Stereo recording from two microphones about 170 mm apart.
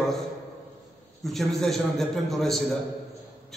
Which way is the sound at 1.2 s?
Centre (ahead or behind).